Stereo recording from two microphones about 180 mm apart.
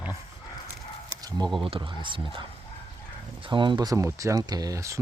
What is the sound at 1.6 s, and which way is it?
Speech, 30° right (ahead or behind).